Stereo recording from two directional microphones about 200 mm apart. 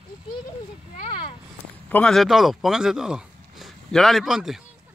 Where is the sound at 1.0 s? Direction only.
25° left (ahead or behind).